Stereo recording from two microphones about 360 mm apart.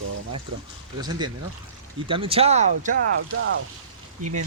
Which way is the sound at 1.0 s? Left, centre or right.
Centre.